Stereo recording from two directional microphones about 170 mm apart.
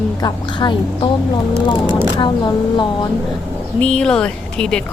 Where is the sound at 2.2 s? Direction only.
25° left (ahead or behind).